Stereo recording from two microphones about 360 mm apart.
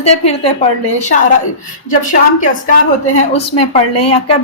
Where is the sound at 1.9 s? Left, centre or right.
Left.